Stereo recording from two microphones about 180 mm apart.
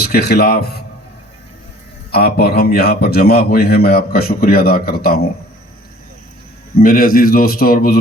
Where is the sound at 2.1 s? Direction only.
60° left (ahead or behind).